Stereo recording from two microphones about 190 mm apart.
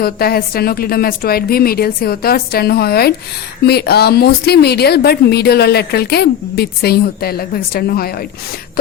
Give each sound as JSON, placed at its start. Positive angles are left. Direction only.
{"t": 0.0, "sound": "a woman's voice", "side_deg": 55}